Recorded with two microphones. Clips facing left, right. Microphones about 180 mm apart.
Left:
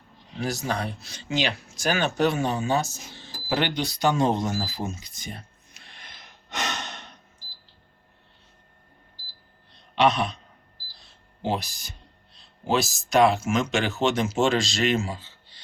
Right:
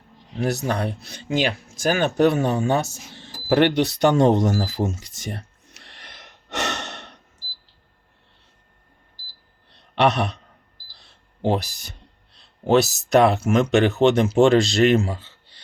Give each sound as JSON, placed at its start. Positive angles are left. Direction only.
{"t": 0.4, "sound": "speech", "side_deg": -60}
{"t": 3.2, "sound": "cash register", "side_deg": -60}
{"t": 10.0, "sound": "a sound", "side_deg": -70}
{"t": 11.4, "sound": "speech", "side_deg": -65}